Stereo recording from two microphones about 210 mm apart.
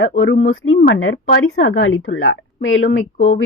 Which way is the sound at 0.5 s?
70° left (ahead or behind).